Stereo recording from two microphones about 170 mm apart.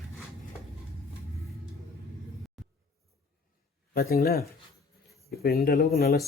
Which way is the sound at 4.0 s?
65° left (ahead or behind).